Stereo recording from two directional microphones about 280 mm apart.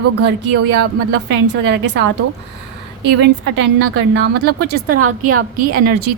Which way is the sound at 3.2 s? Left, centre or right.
Right.